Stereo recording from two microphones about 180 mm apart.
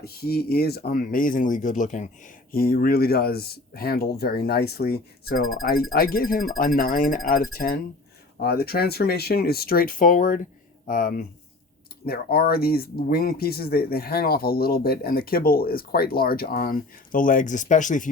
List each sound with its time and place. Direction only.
0.0 s speech: 60° left (ahead or behind); by 18.1 s 45° left (ahead or behind)